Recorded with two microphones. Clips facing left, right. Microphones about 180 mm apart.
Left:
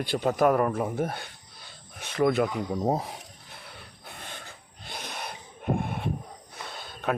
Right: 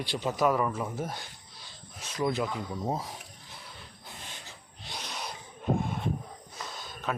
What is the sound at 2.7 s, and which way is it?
Speech, 40° left (ahead or behind).